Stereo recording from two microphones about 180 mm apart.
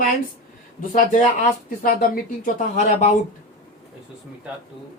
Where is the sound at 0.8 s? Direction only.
50° left (ahead or behind).